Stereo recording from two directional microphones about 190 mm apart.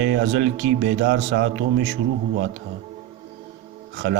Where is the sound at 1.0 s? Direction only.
65° right (ahead or behind).